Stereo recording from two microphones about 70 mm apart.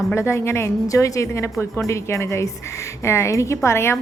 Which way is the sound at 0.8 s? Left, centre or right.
Left.